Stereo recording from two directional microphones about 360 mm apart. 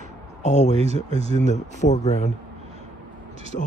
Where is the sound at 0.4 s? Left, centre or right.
Centre.